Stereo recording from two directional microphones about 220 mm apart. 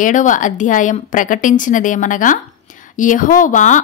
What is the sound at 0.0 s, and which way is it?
A woman's voice, 35° left (ahead or behind).